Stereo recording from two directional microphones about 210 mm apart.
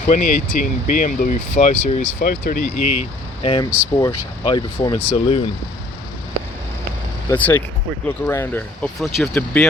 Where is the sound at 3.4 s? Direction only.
25° left (ahead or behind).